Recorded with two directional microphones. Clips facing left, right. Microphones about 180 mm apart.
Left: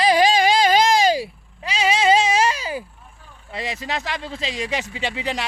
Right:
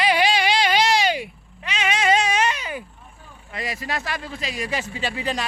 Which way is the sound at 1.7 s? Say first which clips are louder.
Left 3 dB; 35° left (ahead or behind).